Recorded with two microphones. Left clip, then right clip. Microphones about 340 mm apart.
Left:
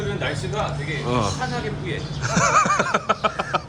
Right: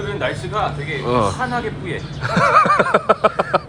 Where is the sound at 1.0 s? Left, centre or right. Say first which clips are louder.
Right 6 dB; centre.